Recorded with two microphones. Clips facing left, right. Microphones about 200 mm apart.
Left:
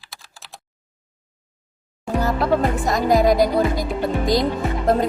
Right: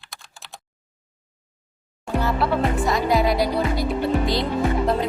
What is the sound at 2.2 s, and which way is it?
Music, 45° left (ahead or behind).